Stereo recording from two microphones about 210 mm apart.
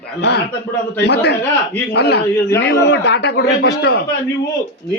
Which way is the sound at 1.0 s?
55° left (ahead or behind).